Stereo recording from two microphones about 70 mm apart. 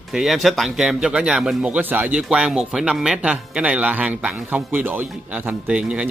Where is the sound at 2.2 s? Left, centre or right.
Centre.